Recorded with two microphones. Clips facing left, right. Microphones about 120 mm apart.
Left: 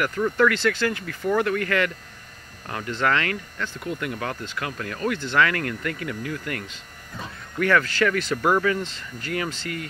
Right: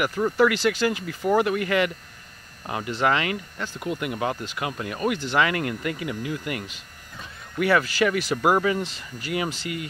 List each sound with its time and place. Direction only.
0.4 s speech: 15° right (ahead or behind)